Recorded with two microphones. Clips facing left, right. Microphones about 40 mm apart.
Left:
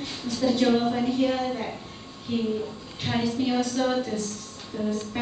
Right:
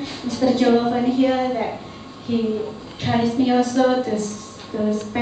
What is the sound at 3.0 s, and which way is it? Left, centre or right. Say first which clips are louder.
A woman's voice: right 7 dB; centre.